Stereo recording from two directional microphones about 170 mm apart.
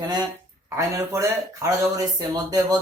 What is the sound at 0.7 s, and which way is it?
Speech, 15° right (ahead or behind).